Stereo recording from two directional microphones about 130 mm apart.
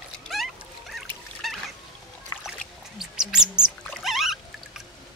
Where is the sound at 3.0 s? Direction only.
5° right (ahead or behind).